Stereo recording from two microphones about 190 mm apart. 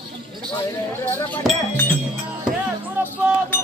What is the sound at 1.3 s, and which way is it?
Music, 10° left (ahead or behind).